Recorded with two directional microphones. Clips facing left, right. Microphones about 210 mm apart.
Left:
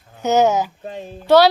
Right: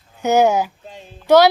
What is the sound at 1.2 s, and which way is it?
Speech, 15° right (ahead or behind).